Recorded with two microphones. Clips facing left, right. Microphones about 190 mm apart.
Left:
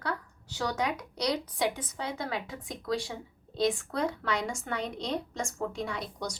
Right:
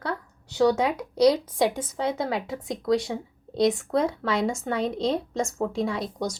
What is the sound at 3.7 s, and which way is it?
Speech, 25° right (ahead or behind).